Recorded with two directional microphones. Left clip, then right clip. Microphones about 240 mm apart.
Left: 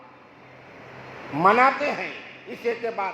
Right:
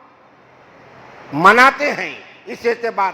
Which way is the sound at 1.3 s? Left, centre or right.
Right.